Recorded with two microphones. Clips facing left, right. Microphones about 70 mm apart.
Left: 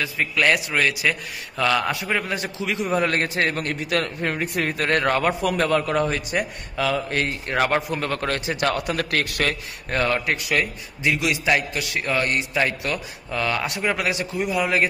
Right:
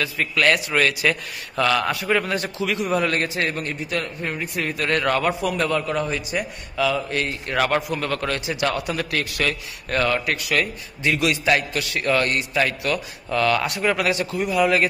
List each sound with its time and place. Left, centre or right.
0.0 s a man's voice: centre
3.0 s a man's voice: left
6.8 s a man's voice: left
9.8 s a man's voice: left